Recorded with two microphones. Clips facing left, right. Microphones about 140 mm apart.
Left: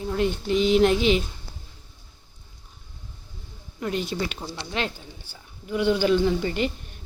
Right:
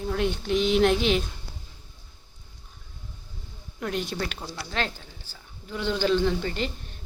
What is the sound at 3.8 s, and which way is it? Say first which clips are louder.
A woman's voice: left 2 dB; centre (ahead or behind).